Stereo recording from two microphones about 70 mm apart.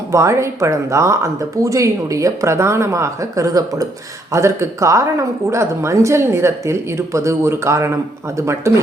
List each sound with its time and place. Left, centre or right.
0.1 s speech: right
4.3 s speech: right